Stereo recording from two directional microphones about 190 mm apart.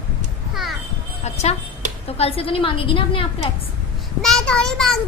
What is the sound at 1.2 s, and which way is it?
A woman's voice, 35° left (ahead or behind).